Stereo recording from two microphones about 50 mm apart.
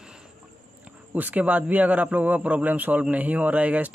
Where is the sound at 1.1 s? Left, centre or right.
Right.